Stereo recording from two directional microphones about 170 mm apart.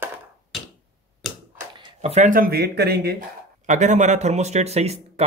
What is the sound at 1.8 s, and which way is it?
Speech, 40° right (ahead or behind).